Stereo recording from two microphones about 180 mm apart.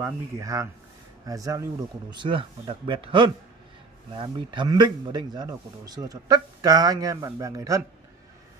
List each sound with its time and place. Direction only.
0.0 s speech: 20° right (ahead or behind)